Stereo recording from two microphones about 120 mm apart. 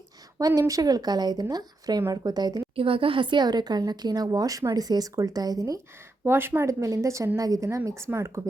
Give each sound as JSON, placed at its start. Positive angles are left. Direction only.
{"t": 0.3, "sound": "speech", "side_deg": -30}
{"t": 2.7, "sound": "speech", "side_deg": -50}
{"t": 6.2, "sound": "speech", "side_deg": -20}